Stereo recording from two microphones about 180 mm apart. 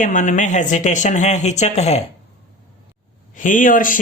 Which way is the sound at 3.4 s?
45° left (ahead or behind).